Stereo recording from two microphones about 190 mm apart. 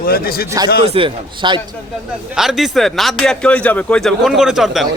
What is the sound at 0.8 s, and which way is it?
Speech, 30° right (ahead or behind).